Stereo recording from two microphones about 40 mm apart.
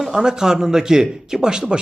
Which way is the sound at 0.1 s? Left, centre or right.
Centre.